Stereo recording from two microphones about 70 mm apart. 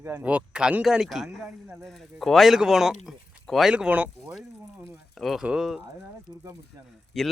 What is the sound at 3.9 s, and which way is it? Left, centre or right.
Speech, right.